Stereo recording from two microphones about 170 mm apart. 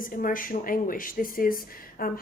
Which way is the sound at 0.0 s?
55° left (ahead or behind).